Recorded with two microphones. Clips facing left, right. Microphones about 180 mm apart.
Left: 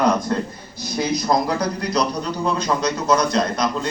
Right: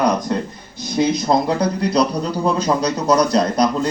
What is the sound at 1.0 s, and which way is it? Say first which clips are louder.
Speech: right 3 dB; 25° right (ahead or behind).